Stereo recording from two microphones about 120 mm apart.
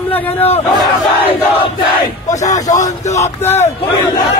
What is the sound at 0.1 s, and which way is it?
Speech, 15° left (ahead or behind).